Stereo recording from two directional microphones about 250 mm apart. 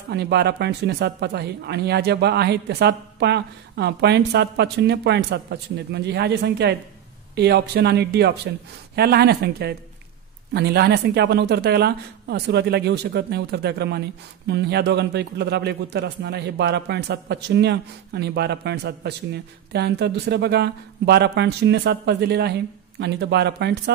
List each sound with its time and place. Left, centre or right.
0.1 s a man's voice: right